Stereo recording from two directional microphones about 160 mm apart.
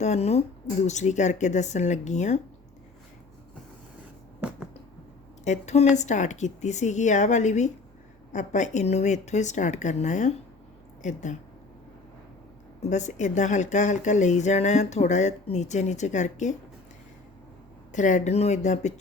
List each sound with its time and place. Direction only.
0.0 s speech: 45° left (ahead or behind)
4.4 s a sound: 5° right (ahead or behind)
5.5 s speech: 45° left (ahead or behind)
12.8 s speech: 45° left (ahead or behind)
17.9 s speech: 50° left (ahead or behind)